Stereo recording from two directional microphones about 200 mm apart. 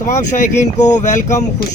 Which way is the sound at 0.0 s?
40° left (ahead or behind).